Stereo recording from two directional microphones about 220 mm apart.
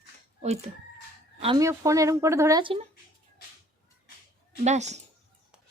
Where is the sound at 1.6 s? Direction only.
15° right (ahead or behind).